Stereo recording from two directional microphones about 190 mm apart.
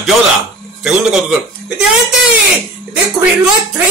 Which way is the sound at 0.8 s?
5° right (ahead or behind).